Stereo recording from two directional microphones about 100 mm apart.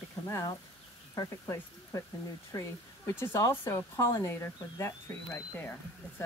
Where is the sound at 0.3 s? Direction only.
30° left (ahead or behind).